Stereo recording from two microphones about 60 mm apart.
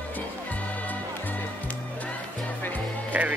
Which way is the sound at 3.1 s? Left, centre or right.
Right.